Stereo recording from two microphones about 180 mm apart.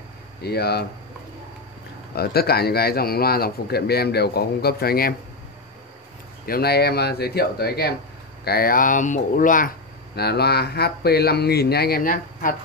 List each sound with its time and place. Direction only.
0.4 s speech: 60° left (ahead or behind)
2.1 s speech: 60° left (ahead or behind)
6.4 s speech: 60° left (ahead or behind)
10.1 s speech: 65° left (ahead or behind)